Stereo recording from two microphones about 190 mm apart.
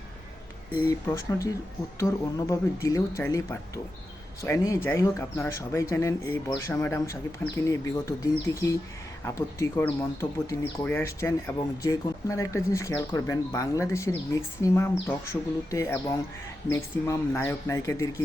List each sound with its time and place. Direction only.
0.8 s speech: 15° left (ahead or behind)